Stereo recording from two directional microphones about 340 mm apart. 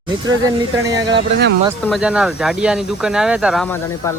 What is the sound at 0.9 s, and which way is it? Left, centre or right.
Speech, centre.